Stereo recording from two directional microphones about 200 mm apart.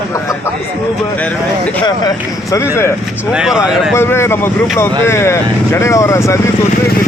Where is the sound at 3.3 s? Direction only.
5° right (ahead or behind).